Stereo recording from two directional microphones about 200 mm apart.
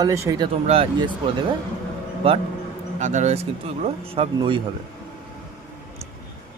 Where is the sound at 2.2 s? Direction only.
30° right (ahead or behind).